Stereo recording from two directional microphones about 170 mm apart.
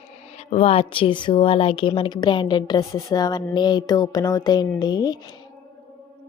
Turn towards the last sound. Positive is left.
turn(degrees=25)  # may be behind; listen again after turning